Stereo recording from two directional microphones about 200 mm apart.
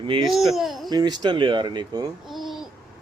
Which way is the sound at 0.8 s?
20° right (ahead or behind).